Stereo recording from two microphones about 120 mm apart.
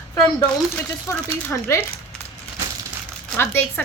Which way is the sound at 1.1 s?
20° left (ahead or behind).